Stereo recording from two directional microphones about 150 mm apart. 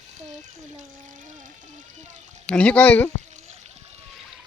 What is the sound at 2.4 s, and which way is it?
Speech, 10° left (ahead or behind).